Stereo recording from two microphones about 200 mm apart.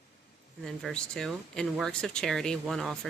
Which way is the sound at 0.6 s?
Centre (ahead or behind).